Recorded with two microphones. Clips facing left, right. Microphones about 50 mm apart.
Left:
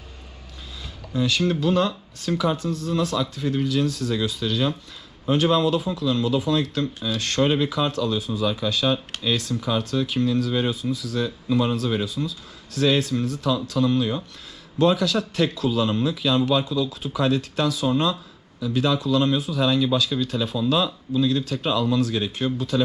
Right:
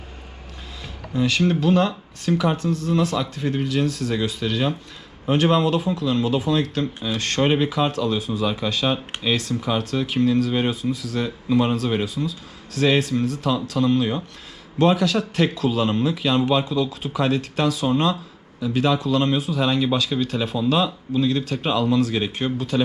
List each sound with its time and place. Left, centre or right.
1.1 s speech: right
7.9 s speech: right
9.6 s speech: right
15.5 s speech: right